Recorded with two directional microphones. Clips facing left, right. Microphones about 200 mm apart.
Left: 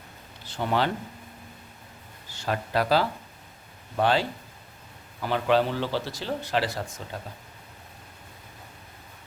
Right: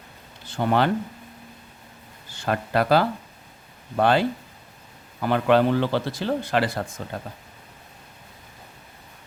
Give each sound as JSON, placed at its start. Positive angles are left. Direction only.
{"t": 0.4, "sound": "speech", "side_deg": -50}
{"t": 2.3, "sound": "speech", "side_deg": -55}